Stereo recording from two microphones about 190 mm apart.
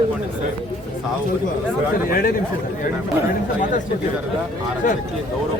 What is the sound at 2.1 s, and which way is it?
Speech, 55° left (ahead or behind).